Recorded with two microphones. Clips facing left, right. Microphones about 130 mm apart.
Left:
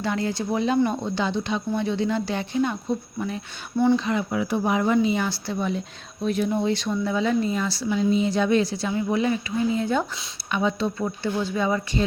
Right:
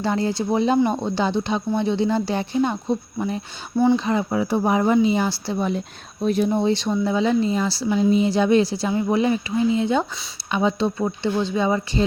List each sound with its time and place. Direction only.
0.0 s speech: 30° right (ahead or behind)